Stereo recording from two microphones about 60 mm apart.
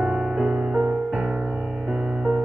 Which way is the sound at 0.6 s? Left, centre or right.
Right.